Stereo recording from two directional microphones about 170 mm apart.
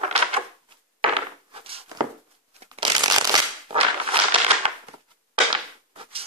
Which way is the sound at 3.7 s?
35° right (ahead or behind).